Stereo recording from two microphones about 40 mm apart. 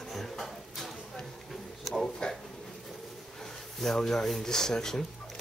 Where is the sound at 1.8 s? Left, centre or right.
Centre.